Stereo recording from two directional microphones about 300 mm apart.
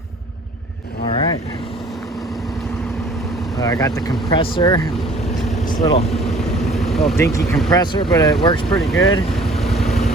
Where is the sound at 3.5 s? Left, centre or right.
Centre.